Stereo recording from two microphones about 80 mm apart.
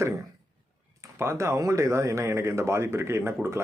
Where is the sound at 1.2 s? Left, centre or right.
Right.